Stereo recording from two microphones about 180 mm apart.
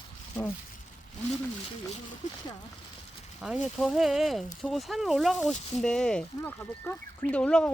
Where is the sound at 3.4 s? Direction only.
Centre (ahead or behind).